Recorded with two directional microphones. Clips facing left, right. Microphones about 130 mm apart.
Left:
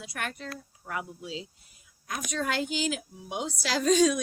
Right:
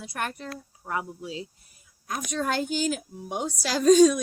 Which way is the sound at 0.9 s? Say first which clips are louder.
Right 4 dB; 35° right (ahead or behind).